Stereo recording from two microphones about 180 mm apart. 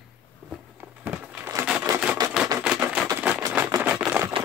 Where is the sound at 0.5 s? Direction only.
10° right (ahead or behind).